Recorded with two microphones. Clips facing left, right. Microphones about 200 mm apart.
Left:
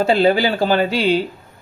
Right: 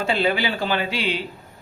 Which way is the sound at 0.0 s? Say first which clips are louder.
Left 7 dB; 40° left (ahead or behind).